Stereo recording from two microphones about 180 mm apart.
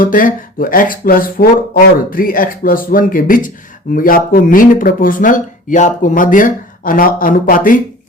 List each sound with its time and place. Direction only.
0.0 s speech: 50° left (ahead or behind)